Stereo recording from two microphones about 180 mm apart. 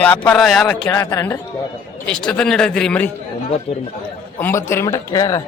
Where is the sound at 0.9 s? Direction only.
15° left (ahead or behind).